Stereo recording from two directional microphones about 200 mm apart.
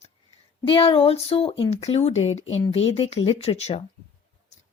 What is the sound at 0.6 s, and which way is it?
Speech, 25° left (ahead or behind).